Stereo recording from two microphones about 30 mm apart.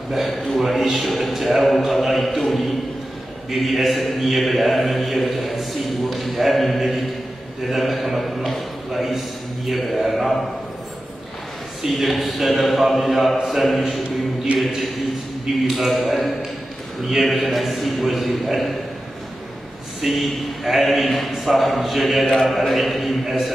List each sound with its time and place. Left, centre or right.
0.1 s a man's voice: centre
3.5 s a man's voice: centre
11.8 s a man's voice: centre
14.5 s a man's voice: right
15.6 s a man's voice: centre
20.0 s a man's voice: centre